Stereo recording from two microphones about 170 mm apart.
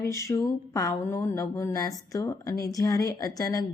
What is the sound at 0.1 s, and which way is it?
Speech, 15° left (ahead or behind).